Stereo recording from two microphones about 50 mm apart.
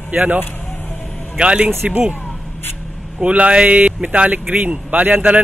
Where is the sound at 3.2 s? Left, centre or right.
Right.